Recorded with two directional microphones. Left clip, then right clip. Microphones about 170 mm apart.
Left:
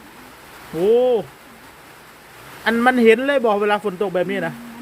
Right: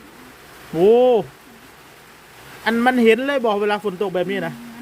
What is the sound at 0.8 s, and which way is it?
Speech, 35° right (ahead or behind).